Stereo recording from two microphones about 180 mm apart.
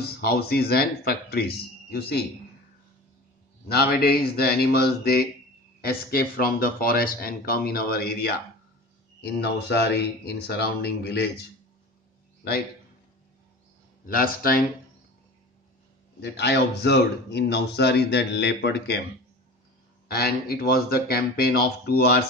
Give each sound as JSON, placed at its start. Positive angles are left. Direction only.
{"t": 0.0, "sound": "speech", "side_deg": 60}
{"t": 3.6, "sound": "speech", "side_deg": 60}
{"t": 14.0, "sound": "a man's voice", "side_deg": 55}
{"t": 16.2, "sound": "speech", "side_deg": 65}
{"t": 20.1, "sound": "speech", "side_deg": 60}